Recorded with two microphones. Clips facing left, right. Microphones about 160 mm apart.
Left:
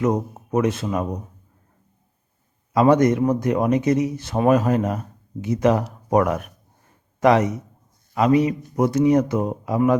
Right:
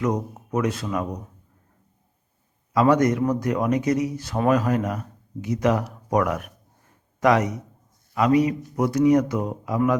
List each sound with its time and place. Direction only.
0.0 s speech: 25° left (ahead or behind)
2.7 s speech: 25° left (ahead or behind)